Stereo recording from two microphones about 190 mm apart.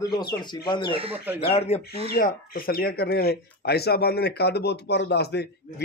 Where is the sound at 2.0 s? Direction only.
50° left (ahead or behind).